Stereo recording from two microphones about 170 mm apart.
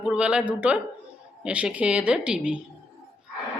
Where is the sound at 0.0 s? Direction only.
5° right (ahead or behind).